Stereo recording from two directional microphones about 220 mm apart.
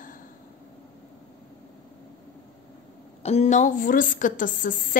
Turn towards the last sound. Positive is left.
turn(degrees=35)  # may be behind; listen again after turning